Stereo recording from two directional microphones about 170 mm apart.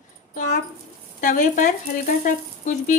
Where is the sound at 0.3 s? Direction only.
50° left (ahead or behind).